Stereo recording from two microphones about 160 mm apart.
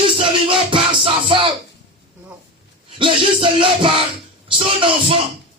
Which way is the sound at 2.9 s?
35° right (ahead or behind).